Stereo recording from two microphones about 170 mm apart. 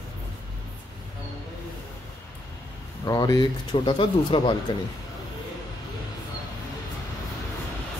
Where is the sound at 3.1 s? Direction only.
25° left (ahead or behind).